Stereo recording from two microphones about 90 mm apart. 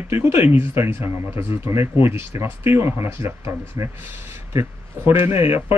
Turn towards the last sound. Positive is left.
turn(degrees=-25)  # may be behind; listen again after turning